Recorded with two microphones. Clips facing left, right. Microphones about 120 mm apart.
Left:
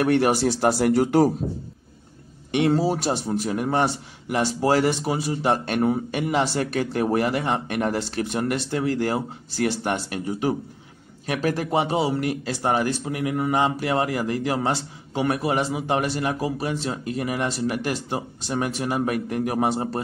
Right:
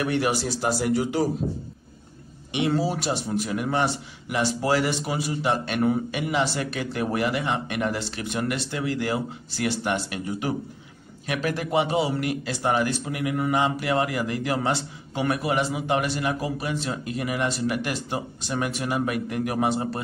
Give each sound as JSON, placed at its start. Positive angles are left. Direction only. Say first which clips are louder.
{"t": 0.0, "sound": "speech", "louder": "left 5 dB", "side_deg": 50}
{"t": 2.7, "sound": "a man's voice", "louder": "left 3 dB", "side_deg": 40}
{"t": 11.2, "sound": "a man's voice", "louder": "left 3 dB", "side_deg": 35}